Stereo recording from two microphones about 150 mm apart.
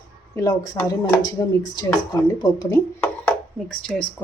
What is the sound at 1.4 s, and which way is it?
Speech, 20° left (ahead or behind).